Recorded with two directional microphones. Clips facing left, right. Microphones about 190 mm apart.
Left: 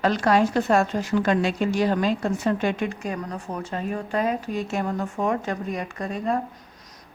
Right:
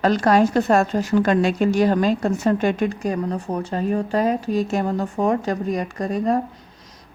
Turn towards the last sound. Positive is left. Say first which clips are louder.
# right 5 dB
turn(degrees=-40)  # may be behind; listen again after turning